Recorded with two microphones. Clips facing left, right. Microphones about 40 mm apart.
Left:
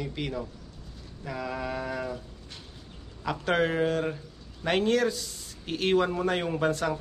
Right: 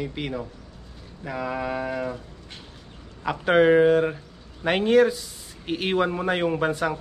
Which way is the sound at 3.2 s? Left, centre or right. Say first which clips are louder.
Right 8 dB; centre.